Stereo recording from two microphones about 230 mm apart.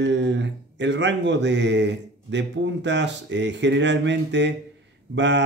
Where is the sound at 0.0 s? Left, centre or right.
Right.